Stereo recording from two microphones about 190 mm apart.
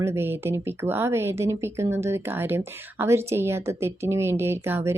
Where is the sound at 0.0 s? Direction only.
15° right (ahead or behind).